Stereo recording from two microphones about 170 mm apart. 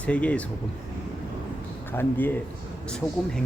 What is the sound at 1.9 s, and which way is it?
Speech, 10° left (ahead or behind).